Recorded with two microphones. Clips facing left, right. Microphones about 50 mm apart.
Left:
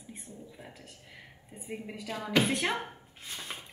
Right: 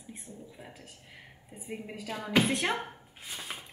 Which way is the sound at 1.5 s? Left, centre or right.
Centre.